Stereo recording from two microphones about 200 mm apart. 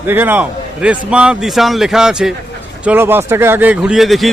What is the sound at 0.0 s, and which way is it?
A man's voice, 10° right (ahead or behind).